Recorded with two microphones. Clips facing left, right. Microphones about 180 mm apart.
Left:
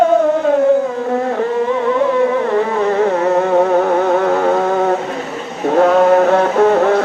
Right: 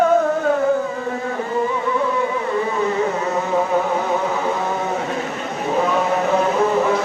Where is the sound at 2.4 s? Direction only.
70° left (ahead or behind).